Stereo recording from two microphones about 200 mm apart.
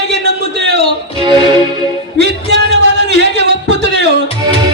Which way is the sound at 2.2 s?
60° right (ahead or behind).